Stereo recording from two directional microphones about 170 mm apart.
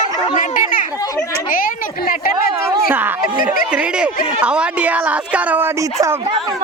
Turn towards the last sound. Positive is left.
turn(degrees=-10)  # may be behind; listen again after turning